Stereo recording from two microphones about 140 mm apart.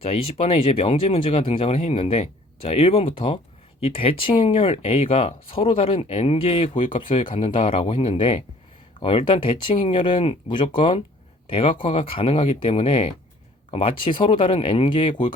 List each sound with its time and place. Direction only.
0.0 s speech: 45° left (ahead or behind)